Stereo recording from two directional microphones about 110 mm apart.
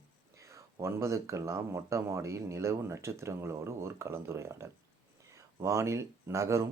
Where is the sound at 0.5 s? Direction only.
25° right (ahead or behind).